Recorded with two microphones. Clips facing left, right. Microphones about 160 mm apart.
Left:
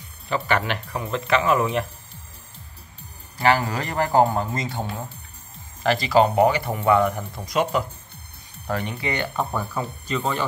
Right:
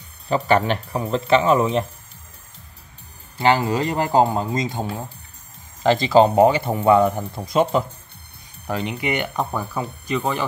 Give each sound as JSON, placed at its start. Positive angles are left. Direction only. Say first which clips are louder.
{"t": 0.3, "sound": "speech", "louder": "right 5 dB", "side_deg": -35}
{"t": 3.3, "sound": "speech", "louder": "right 3 dB", "side_deg": -20}
{"t": 8.6, "sound": "speech", "louder": "right 2 dB", "side_deg": -15}